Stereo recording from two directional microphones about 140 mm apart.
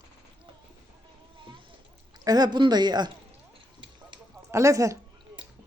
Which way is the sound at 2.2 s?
30° right (ahead or behind).